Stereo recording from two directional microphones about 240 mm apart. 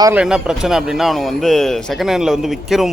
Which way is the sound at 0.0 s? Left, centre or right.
Centre.